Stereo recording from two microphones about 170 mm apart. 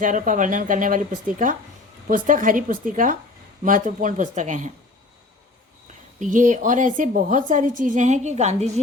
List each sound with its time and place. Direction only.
0.0 s a woman's voice: 50° right (ahead or behind)
6.1 s a woman's voice: 50° right (ahead or behind)